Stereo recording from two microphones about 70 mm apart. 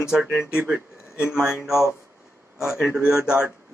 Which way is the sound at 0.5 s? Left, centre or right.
Centre.